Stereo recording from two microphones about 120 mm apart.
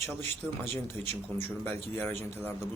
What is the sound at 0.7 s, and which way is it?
Speech, 55° right (ahead or behind).